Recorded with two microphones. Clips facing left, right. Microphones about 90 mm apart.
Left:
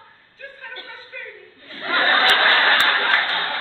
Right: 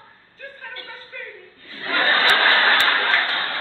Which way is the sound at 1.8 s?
30° left (ahead or behind).